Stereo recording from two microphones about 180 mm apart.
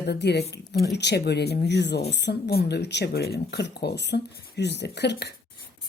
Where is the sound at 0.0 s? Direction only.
65° left (ahead or behind).